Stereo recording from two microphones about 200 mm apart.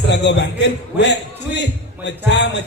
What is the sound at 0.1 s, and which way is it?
A man's voice, 60° left (ahead or behind).